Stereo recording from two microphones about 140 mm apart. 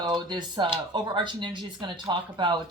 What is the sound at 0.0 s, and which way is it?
Speech, 30° right (ahead or behind).